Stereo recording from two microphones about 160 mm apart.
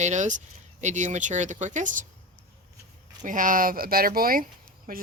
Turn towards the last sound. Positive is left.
turn(degrees=-60)  # may be behind; listen again after turning